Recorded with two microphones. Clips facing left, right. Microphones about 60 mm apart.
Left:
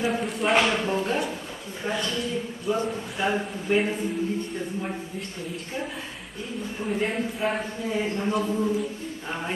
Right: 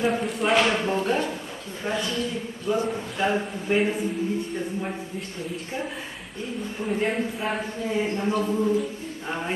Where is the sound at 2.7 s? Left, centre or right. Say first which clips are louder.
Right 2 dB; centre.